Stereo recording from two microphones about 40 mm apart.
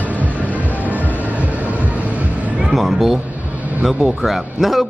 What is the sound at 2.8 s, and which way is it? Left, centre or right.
Speech, centre.